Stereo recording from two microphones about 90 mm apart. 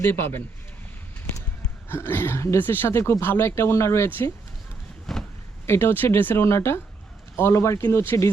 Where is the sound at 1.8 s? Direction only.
25° left (ahead or behind).